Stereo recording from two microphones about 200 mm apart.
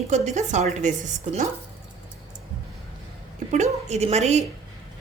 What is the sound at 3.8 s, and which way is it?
Speech, 35° right (ahead or behind).